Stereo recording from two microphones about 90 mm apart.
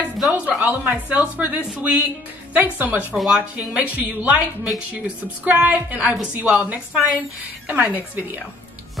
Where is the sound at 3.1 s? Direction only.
5° right (ahead or behind).